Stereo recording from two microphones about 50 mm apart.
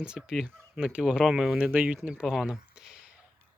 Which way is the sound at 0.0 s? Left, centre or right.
Centre.